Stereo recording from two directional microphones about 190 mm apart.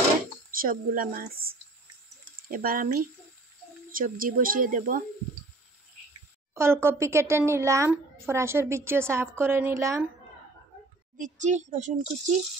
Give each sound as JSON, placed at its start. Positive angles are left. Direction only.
{"t": 0.5, "sound": "speech", "side_deg": -50}
{"t": 6.5, "sound": "a child's voice", "side_deg": -15}
{"t": 11.1, "sound": "a child's voice", "side_deg": -40}